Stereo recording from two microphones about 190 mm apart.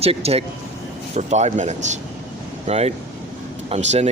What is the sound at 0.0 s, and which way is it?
Speech, 30° right (ahead or behind).